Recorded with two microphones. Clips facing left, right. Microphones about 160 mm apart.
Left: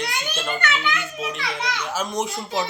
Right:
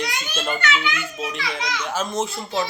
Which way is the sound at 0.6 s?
55° left (ahead or behind).